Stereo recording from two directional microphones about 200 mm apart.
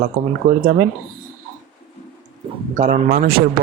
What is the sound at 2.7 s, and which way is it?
Speech, 40° right (ahead or behind).